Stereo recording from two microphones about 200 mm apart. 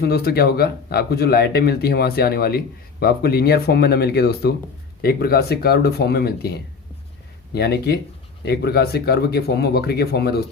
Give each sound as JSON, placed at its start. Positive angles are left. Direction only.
{"t": 0.0, "sound": "speech", "side_deg": 50}